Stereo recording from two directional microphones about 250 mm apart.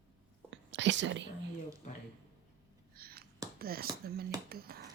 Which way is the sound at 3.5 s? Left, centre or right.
Right.